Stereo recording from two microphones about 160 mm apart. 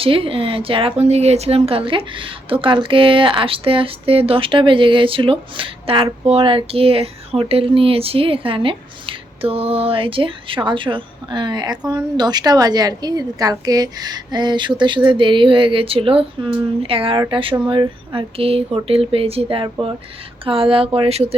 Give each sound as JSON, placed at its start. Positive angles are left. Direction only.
{"t": 0.0, "sound": "a woman's voice", "side_deg": -35}